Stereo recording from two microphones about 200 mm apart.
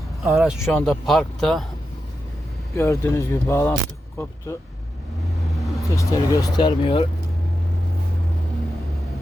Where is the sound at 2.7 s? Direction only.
15° left (ahead or behind).